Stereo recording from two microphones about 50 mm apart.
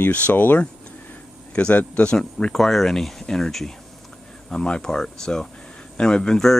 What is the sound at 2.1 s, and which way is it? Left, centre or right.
Speech, centre.